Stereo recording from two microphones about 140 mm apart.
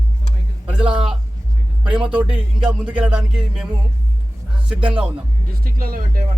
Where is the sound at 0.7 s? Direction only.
5° right (ahead or behind).